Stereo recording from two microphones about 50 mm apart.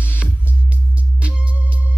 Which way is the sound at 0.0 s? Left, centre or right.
Right.